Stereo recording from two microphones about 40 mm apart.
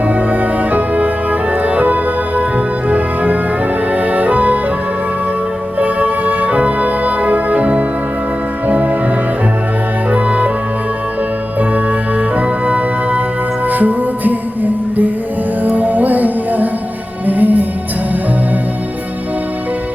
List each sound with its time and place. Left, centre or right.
0.1 s music: right
3.9 s music: right
5.8 s music: right
10.1 s music: right
12.4 s music: right